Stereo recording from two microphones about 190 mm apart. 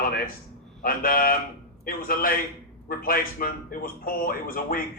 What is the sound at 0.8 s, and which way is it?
A man's voice, 50° left (ahead or behind).